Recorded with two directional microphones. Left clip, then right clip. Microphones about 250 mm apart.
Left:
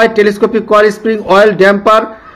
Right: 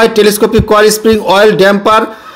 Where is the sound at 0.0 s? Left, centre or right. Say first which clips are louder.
Right 1 dB; right.